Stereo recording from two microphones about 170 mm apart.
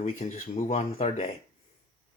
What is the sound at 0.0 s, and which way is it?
Speech, 40° left (ahead or behind).